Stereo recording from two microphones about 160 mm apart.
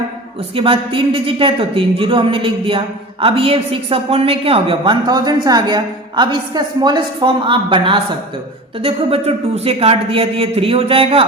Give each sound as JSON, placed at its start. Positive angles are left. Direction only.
{"t": 0.5, "sound": "a woman's voice", "side_deg": -35}